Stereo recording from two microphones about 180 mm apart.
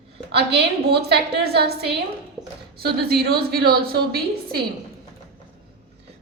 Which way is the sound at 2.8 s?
60° right (ahead or behind).